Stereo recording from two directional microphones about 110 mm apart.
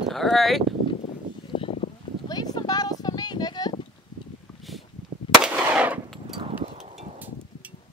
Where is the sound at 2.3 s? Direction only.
40° left (ahead or behind).